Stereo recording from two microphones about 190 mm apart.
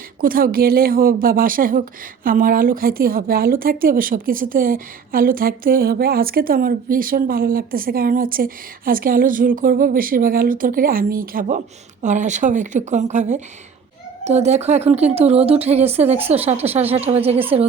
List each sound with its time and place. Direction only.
0.2 s a woman's voice: 50° right (ahead or behind); by 17.4 s 30° right (ahead or behind)